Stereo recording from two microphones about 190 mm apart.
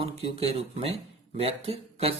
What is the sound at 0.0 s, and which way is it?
Speech, 30° right (ahead or behind).